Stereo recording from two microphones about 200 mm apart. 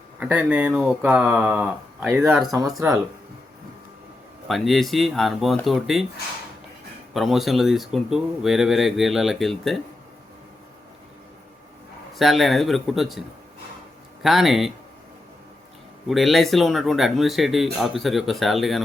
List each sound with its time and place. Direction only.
0.2 s speech: 5° right (ahead or behind)
2.4 s speech: 20° right (ahead or behind)
4.4 s speech: centre (ahead or behind)
7.1 s speech: centre (ahead or behind)
12.1 s speech: centre (ahead or behind)
16.0 s speech: centre (ahead or behind)